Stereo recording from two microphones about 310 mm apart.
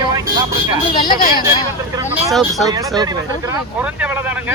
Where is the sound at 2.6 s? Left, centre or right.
Centre.